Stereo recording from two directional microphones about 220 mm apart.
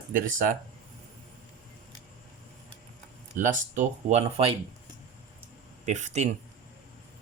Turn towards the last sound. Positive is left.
turn(degrees=-30)  # may be behind; listen again after turning